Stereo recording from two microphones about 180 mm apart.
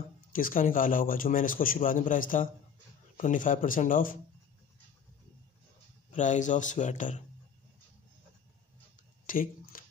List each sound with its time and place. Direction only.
0.3 s a man's voice: 50° left (ahead or behind)
6.1 s a man's voice: 45° left (ahead or behind)
9.2 s a sound: 50° left (ahead or behind)